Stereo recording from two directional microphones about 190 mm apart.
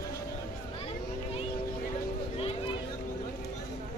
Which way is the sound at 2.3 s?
30° left (ahead or behind).